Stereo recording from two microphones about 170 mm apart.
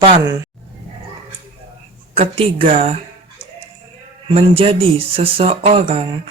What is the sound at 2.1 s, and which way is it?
Speech, 35° right (ahead or behind).